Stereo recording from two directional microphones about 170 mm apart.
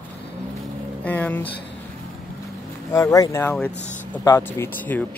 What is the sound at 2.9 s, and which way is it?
Speech, 20° left (ahead or behind).